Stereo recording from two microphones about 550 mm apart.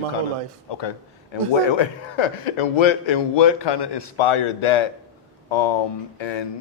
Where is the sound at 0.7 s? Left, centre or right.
Left.